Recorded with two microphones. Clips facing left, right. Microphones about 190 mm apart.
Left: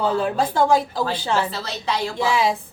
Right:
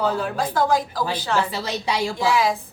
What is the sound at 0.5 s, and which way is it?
Speech, 25° left (ahead or behind).